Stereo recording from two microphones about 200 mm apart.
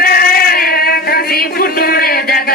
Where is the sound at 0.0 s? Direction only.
50° left (ahead or behind).